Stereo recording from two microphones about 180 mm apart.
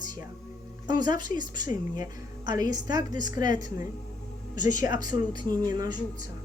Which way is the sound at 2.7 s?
20° right (ahead or behind).